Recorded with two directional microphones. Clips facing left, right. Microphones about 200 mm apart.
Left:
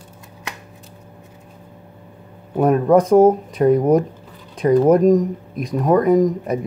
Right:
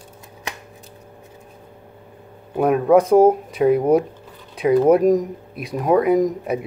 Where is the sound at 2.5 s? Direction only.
5° right (ahead or behind).